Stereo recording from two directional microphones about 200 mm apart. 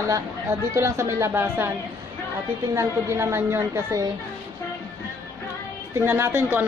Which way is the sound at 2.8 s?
15° right (ahead or behind).